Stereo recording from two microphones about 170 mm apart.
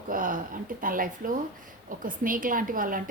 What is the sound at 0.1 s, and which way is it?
A woman's voice, 55° right (ahead or behind).